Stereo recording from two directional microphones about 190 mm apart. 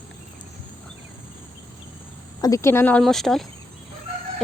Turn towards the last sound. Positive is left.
turn(degrees=0)  # may be behind; listen again after turning